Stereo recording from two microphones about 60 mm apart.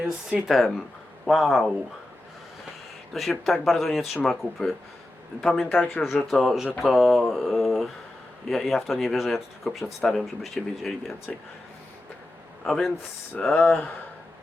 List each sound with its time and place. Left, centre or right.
0.0 s speech: centre
0.4 s speech: centre
3.1 s speech: centre
5.9 s speech: centre
9.8 s speech: centre
12.6 s speech: centre
13.5 s speech: left